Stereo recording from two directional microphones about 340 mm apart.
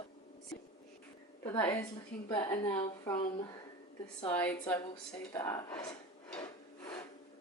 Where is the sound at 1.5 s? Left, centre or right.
Centre.